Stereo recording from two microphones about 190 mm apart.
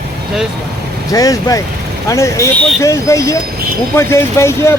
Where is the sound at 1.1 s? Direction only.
20° left (ahead or behind).